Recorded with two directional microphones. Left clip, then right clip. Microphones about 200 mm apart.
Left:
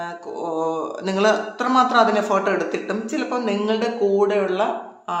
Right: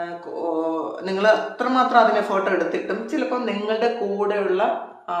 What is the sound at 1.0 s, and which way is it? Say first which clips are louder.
A man's voice: right 1 dB; 30° left (ahead or behind).